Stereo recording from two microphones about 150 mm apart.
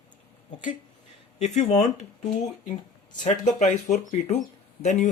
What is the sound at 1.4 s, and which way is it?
Speech, 50° left (ahead or behind).